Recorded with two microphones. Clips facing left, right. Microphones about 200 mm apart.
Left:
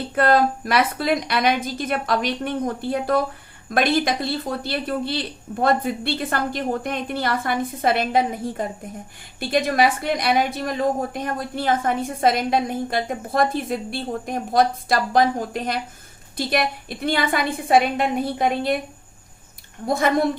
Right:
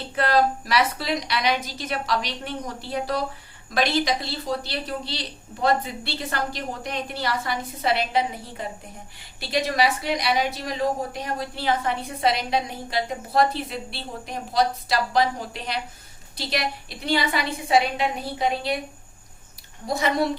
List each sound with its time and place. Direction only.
0.2 s a woman's voice: 50° left (ahead or behind)
19.9 s a woman's voice: 50° left (ahead or behind)